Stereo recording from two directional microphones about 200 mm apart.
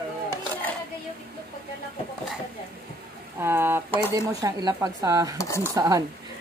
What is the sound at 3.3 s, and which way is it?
Speech, 10° right (ahead or behind).